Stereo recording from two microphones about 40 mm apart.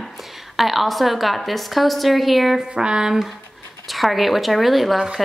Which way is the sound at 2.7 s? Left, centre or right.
Right.